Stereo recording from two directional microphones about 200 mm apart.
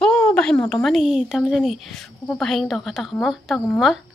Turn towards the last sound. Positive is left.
turn(degrees=0)  # may be behind; listen again after turning